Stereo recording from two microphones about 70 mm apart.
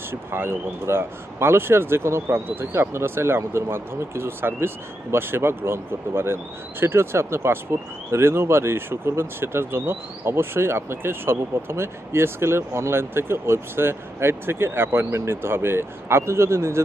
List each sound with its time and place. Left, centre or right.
0.1 s speech: right